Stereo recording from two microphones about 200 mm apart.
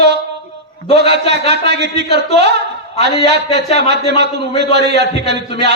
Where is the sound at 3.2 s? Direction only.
60° right (ahead or behind).